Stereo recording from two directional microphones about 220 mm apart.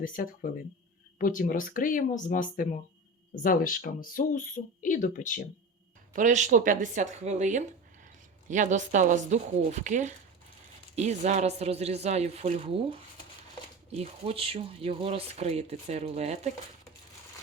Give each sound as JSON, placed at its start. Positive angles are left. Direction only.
{"t": 0.0, "sound": "speech", "side_deg": 40}
{"t": 6.1, "sound": "speech", "side_deg": -35}